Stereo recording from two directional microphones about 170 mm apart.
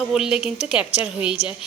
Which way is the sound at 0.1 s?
5° right (ahead or behind).